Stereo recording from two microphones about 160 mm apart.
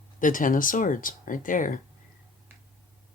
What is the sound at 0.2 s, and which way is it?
Speech, 55° left (ahead or behind).